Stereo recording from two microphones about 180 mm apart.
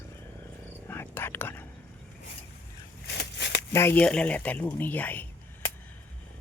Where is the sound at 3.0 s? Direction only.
70° left (ahead or behind).